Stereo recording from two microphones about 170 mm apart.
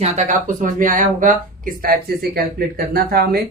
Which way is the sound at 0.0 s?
40° right (ahead or behind).